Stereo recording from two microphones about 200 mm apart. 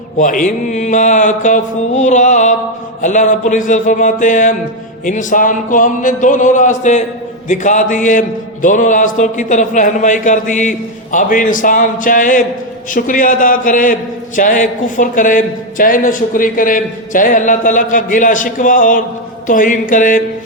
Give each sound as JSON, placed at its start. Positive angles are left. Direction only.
{"t": 0.2, "sound": "a man's voice", "side_deg": 40}